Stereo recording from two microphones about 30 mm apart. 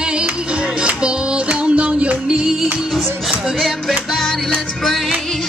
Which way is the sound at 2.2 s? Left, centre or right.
Right.